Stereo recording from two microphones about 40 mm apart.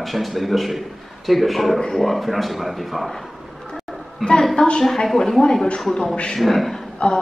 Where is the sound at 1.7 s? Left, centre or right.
Centre.